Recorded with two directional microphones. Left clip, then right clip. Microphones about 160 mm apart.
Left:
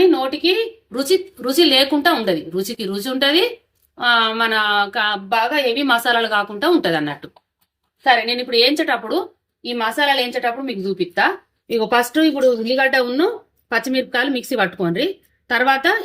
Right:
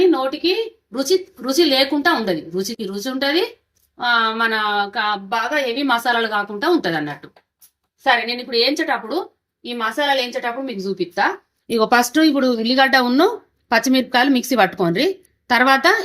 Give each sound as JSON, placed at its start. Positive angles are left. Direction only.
{"t": 0.9, "sound": "speech", "side_deg": 15}
{"t": 11.8, "sound": "speech", "side_deg": -55}